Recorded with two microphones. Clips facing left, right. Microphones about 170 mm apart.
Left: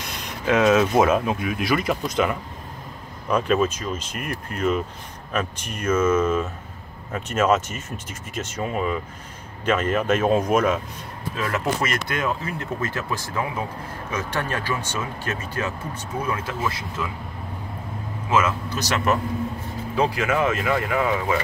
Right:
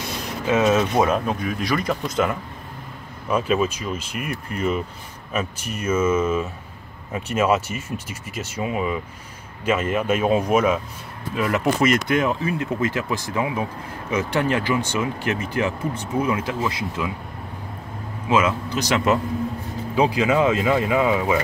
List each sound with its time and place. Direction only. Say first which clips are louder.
0.5 s speech: left 1 dB; centre (ahead or behind); by 17.1 s 20° right (ahead or behind)
18.3 s speech: right 2 dB; 15° right (ahead or behind)